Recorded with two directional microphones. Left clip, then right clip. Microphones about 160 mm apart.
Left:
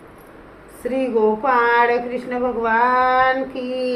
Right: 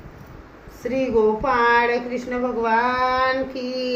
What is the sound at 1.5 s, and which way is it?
A woman's voice, 10° left (ahead or behind).